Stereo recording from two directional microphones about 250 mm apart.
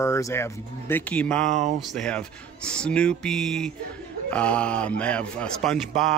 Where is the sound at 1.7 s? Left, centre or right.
Centre.